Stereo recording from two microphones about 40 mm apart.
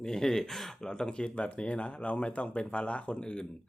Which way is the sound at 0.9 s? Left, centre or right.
Left.